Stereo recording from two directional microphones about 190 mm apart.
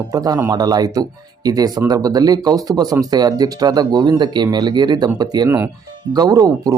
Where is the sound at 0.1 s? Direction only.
20° right (ahead or behind).